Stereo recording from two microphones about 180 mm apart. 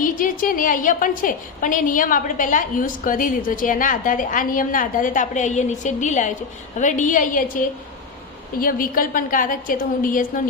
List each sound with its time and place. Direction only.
0.0 s a woman's voice: 50° left (ahead or behind)